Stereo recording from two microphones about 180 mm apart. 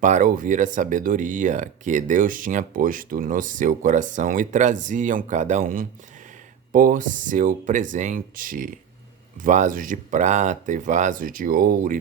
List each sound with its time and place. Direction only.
0.0 s speech: 45° right (ahead or behind)